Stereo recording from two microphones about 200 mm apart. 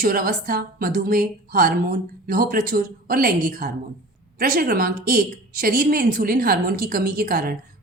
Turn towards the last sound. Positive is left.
turn(degrees=-45)  # may be behind; listen again after turning